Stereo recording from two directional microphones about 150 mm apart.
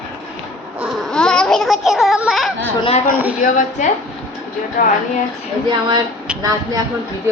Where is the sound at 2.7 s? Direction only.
35° left (ahead or behind).